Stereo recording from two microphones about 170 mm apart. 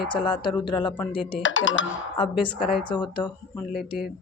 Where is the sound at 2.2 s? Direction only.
30° left (ahead or behind).